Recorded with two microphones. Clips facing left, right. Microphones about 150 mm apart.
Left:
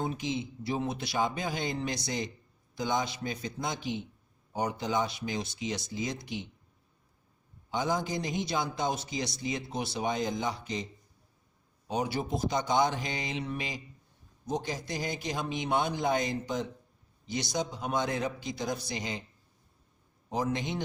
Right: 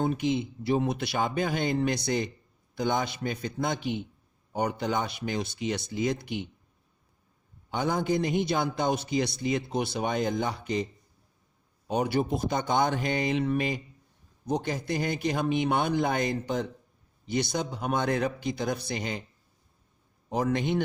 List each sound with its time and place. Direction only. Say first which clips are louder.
0.0 s a man's voice: right 6 dB; 60° right (ahead or behind)
7.7 s a man's voice: right 4 dB; 60° right (ahead or behind)
11.9 s a man's voice: right 5 dB; 60° right (ahead or behind)
20.3 s a man's voice: right 5 dB; 60° right (ahead or behind)